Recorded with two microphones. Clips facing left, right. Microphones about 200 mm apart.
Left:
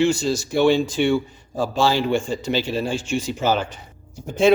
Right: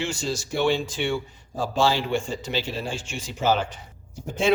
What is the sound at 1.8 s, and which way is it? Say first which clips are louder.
Speech: left 3 dB; 40° left (ahead or behind).